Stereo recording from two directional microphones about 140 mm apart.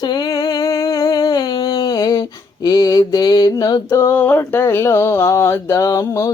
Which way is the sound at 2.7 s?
25° left (ahead or behind).